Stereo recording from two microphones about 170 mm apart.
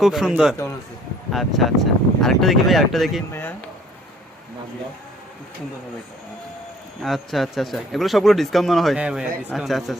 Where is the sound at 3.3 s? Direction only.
10° left (ahead or behind).